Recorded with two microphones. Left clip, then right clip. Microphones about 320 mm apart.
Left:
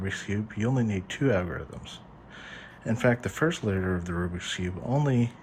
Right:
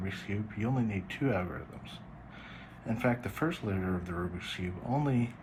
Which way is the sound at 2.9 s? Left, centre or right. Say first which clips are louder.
Left 6 dB; left.